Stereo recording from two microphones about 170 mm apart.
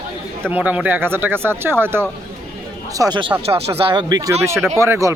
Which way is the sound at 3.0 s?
25° right (ahead or behind).